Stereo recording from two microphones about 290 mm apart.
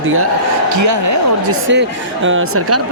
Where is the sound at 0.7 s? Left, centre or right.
Right.